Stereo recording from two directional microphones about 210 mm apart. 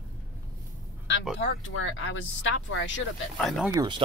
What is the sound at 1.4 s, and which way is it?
Speech, 65° left (ahead or behind).